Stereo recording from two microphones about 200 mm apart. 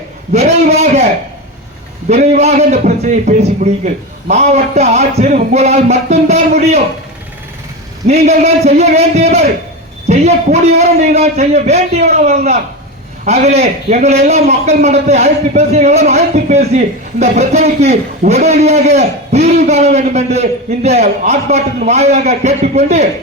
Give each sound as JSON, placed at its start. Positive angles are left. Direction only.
{"t": 2.0, "sound": "a man's voice", "side_deg": -35}
{"t": 8.0, "sound": "a man's voice", "side_deg": -35}